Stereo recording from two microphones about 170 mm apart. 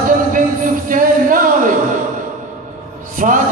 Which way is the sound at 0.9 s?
50° right (ahead or behind).